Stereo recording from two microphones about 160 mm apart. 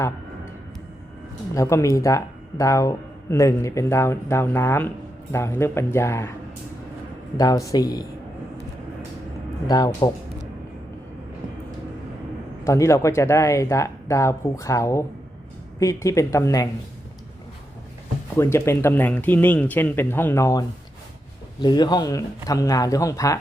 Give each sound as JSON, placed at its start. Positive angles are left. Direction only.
{"t": 1.5, "sound": "speech", "side_deg": 20}
{"t": 7.3, "sound": "speech", "side_deg": 20}
{"t": 9.6, "sound": "speech", "side_deg": 25}
{"t": 12.6, "sound": "speech", "side_deg": 20}
{"t": 18.3, "sound": "speech", "side_deg": 15}